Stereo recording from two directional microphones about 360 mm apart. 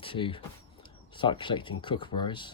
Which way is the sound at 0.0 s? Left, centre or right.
Centre.